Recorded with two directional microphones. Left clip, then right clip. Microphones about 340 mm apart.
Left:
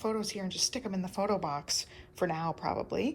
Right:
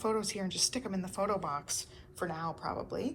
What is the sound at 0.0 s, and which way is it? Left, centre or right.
A woman's voice, centre.